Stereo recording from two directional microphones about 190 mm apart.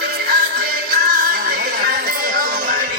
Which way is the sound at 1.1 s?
50° right (ahead or behind).